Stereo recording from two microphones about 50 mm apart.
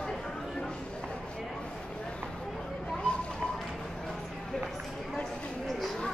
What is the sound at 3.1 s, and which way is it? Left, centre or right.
Run, left.